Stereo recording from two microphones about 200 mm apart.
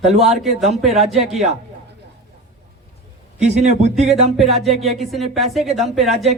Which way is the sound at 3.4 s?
35° right (ahead or behind).